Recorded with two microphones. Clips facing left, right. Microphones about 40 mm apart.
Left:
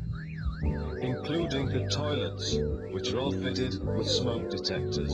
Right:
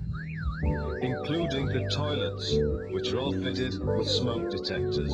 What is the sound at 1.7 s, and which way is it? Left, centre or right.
Speech, right.